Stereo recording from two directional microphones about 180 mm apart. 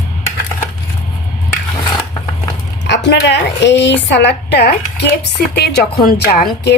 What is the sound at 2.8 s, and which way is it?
A woman's voice, 70° left (ahead or behind).